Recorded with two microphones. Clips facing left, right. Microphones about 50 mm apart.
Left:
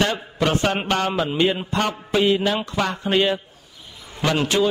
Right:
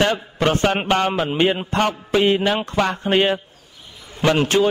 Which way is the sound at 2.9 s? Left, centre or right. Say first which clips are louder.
Right 1 dB; right.